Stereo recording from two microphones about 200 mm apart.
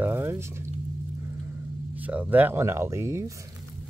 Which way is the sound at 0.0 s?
10° right (ahead or behind).